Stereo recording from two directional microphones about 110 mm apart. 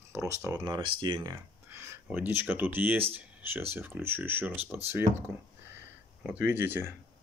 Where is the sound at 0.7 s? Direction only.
50° right (ahead or behind).